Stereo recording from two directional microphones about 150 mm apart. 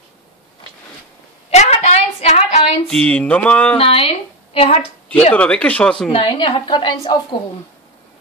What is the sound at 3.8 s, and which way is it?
Speech, 40° left (ahead or behind).